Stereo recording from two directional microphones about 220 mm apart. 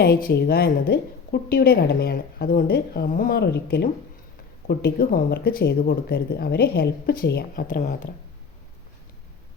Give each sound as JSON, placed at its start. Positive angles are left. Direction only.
{"t": 0.0, "sound": "a woman's voice", "side_deg": 45}